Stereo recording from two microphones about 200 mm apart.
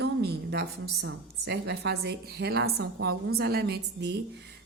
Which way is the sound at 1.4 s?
55° right (ahead or behind).